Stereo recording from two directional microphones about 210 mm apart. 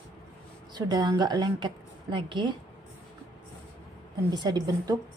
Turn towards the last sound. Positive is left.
turn(degrees=-20)  # may be behind; listen again after turning